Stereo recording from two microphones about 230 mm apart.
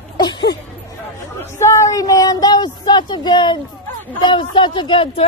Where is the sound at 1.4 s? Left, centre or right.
Centre.